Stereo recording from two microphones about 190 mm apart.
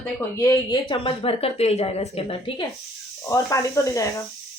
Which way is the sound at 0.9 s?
30° left (ahead or behind).